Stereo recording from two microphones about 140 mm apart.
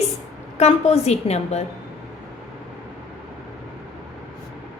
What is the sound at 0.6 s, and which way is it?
A woman's voice, 50° left (ahead or behind).